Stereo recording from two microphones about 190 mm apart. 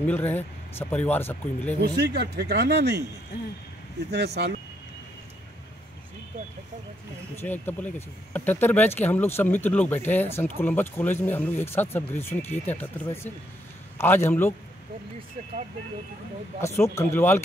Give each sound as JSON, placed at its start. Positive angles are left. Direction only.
{"t": 0.0, "sound": "speech", "side_deg": 10}
{"t": 1.8, "sound": "speech", "side_deg": -60}
{"t": 4.1, "sound": "speech", "side_deg": -60}
{"t": 7.4, "sound": "speech", "side_deg": 10}
{"t": 16.6, "sound": "speech", "side_deg": 15}